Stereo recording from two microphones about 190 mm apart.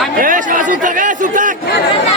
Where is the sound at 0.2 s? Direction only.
45° right (ahead or behind).